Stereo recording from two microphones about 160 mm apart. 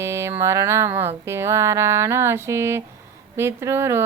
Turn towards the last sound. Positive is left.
turn(degrees=-15)  # may be behind; listen again after turning